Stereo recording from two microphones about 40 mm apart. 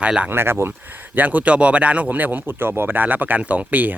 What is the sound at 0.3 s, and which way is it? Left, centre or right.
Speech, right.